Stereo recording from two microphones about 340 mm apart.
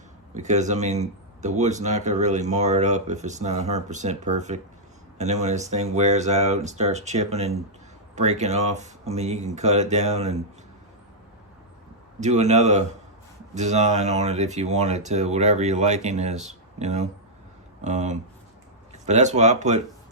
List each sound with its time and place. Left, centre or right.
0.3 s speech: right
12.2 s speech: centre